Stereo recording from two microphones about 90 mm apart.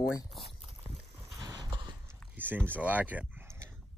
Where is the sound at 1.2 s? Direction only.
35° right (ahead or behind).